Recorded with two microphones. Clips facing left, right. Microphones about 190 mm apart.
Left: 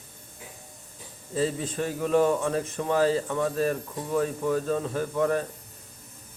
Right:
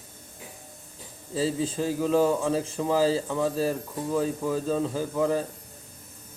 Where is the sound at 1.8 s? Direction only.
15° right (ahead or behind).